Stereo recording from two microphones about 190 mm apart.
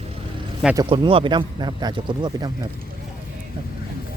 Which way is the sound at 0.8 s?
25° right (ahead or behind).